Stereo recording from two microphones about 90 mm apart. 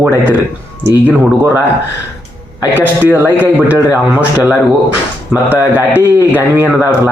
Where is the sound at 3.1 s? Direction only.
20° right (ahead or behind).